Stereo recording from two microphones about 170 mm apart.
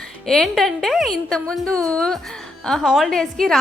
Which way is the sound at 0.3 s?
Centre (ahead or behind).